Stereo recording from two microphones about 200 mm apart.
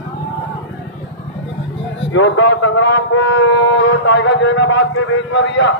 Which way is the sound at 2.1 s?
70° left (ahead or behind).